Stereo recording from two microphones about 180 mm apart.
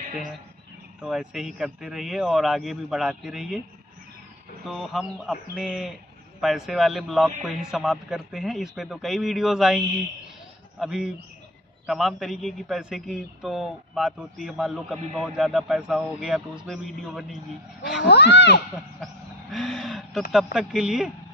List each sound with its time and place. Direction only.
1.0 s a man's voice: 5° right (ahead or behind)
4.6 s a man's voice: centre (ahead or behind)
18.0 s speech: 70° left (ahead or behind)
19.5 s a man's voice: centre (ahead or behind)